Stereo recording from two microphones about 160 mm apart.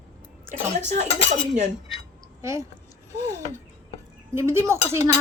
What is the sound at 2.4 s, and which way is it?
Speech, 20° right (ahead or behind).